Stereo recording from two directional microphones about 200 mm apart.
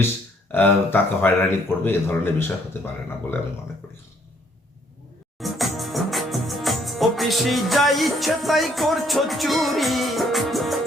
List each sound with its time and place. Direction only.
0.0 s speech: 10° left (ahead or behind)
5.4 s music: centre (ahead or behind)